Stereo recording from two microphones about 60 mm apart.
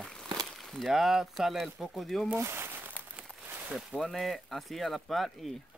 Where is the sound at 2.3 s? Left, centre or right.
Right.